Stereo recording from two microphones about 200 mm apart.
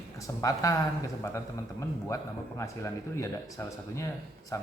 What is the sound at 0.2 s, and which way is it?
Speech, 15° left (ahead or behind).